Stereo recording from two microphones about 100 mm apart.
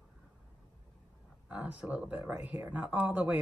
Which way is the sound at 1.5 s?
15° right (ahead or behind).